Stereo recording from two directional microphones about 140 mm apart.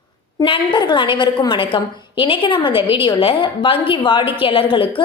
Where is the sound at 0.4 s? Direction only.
35° left (ahead or behind).